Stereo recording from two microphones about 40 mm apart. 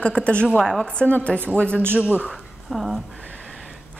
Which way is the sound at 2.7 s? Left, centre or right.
Centre.